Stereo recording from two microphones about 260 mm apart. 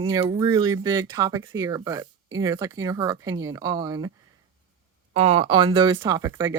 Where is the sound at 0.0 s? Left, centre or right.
Centre.